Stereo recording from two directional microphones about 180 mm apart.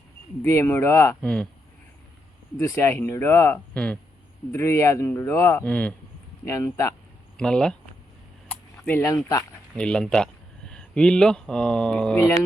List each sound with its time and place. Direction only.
0.4 s speech: 15° left (ahead or behind)
2.6 s speech: 15° left (ahead or behind)
7.3 s speech: 5° left (ahead or behind)
8.4 s a sound: 10° left (ahead or behind)
9.7 s speech: 5° left (ahead or behind)